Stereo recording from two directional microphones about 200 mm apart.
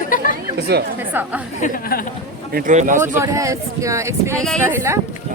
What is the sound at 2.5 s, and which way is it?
Speech, 40° right (ahead or behind).